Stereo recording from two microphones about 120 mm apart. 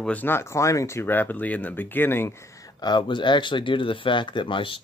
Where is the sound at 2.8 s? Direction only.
40° left (ahead or behind).